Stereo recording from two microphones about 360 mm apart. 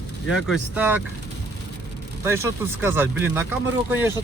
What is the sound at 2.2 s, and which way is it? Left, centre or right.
Speech, centre.